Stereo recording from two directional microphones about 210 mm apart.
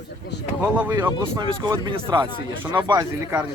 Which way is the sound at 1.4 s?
20° right (ahead or behind).